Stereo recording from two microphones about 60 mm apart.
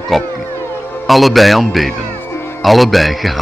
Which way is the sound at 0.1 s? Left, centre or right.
Centre.